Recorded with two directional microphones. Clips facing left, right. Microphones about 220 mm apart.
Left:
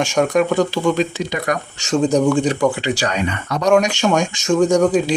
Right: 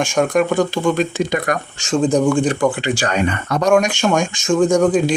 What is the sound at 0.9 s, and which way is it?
Speech, 50° right (ahead or behind).